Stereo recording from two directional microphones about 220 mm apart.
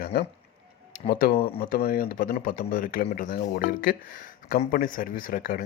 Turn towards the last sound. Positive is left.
turn(degrees=40)  # may be behind; listen again after turning